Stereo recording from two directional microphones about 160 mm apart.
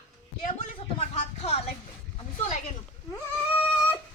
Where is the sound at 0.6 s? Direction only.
45° left (ahead or behind).